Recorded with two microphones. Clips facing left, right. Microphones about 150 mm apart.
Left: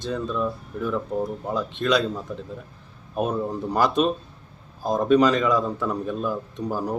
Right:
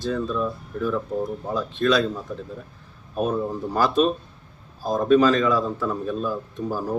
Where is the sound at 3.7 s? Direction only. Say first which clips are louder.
Right 1 dB; 15° left (ahead or behind).